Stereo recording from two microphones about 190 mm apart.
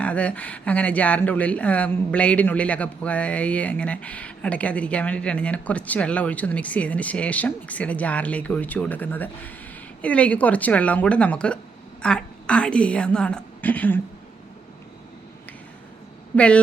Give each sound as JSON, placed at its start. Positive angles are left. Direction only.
{"t": 0.0, "sound": "a woman's voice", "side_deg": 5}
{"t": 16.3, "sound": "speech", "side_deg": 5}